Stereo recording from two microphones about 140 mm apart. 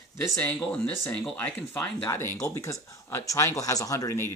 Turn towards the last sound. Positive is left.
turn(degrees=20)  # may be behind; listen again after turning